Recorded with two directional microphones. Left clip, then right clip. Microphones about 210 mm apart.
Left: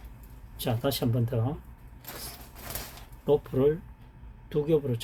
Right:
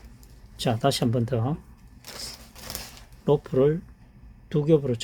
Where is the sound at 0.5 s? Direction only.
50° right (ahead or behind).